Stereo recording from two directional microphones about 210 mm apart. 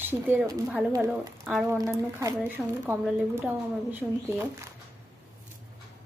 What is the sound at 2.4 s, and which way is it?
A woman's voice, 5° right (ahead or behind).